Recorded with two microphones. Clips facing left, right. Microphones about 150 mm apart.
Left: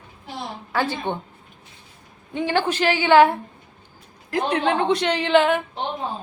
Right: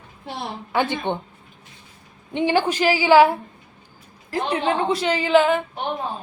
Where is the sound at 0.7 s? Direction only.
20° right (ahead or behind).